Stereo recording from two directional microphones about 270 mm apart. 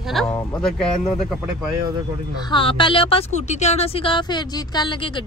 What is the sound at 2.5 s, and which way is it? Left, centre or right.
A woman's voice, centre.